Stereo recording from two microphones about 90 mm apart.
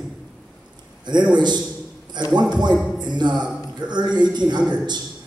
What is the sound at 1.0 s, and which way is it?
A man's voice, 55° right (ahead or behind).